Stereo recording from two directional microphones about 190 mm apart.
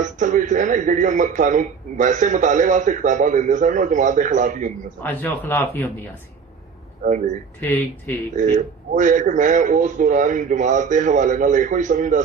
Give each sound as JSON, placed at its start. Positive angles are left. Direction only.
{"t": 0.0, "sound": "a man's voice", "side_deg": -40}
{"t": 5.0, "sound": "speech", "side_deg": 10}
{"t": 7.6, "sound": "speech", "side_deg": 10}
{"t": 8.4, "sound": "a man's voice", "side_deg": -40}